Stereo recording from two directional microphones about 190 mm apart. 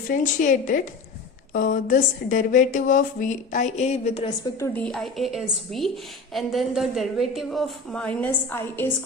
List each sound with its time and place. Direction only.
0.1 s speech: 45° left (ahead or behind)
4.6 s a woman's voice: 10° left (ahead or behind)